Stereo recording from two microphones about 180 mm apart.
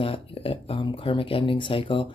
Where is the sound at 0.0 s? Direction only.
30° left (ahead or behind).